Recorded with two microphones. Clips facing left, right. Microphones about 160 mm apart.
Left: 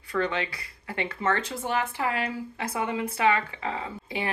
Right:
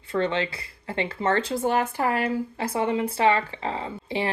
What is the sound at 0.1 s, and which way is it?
Speech, 30° right (ahead or behind).